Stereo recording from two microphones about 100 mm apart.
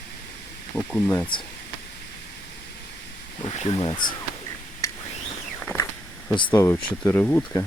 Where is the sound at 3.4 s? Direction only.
80° left; by 4.1 s 55° left (ahead or behind).